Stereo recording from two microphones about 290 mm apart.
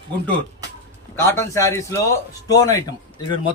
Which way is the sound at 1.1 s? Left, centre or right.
Centre.